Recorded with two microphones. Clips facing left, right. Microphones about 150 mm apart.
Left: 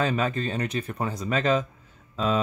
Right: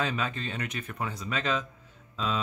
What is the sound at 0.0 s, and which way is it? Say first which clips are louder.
Speech: left 6 dB; 45° left (ahead or behind).